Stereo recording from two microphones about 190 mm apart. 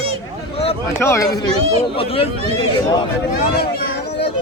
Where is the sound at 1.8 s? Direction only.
30° left (ahead or behind).